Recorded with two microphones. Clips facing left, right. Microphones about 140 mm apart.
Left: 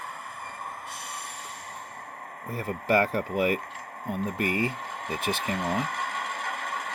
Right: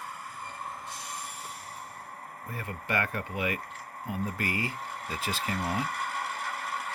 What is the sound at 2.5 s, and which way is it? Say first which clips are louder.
Speech: left 8 dB; 35° left (ahead or behind).